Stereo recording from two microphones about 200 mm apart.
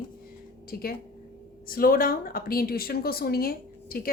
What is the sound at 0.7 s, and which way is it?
Speech, 50° left (ahead or behind).